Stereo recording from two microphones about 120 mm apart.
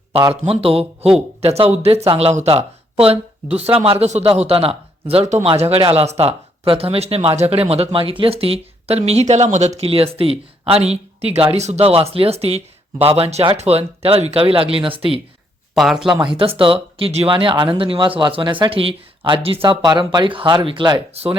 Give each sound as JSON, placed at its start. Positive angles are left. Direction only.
{"t": 0.4, "sound": "speech", "side_deg": -55}
{"t": 3.8, "sound": "speech", "side_deg": -50}
{"t": 4.0, "sound": "a man's voice", "side_deg": -70}
{"t": 4.4, "sound": "speech", "side_deg": -55}
{"t": 15.7, "sound": "speech", "side_deg": 0}
{"t": 16.2, "sound": "speech", "side_deg": -45}
{"t": 21.1, "sound": "speech", "side_deg": -60}